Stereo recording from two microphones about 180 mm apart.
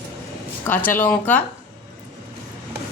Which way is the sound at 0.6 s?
10° left (ahead or behind).